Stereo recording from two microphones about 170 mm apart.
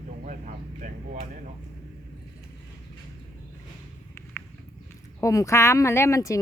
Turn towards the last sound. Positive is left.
turn(degrees=20)  # may be behind; listen again after turning